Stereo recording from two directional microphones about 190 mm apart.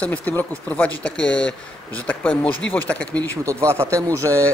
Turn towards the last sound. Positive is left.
turn(degrees=-15)  # may be behind; listen again after turning